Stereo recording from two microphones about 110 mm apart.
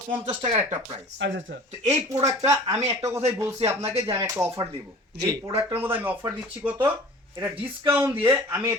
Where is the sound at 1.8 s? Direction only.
80° right.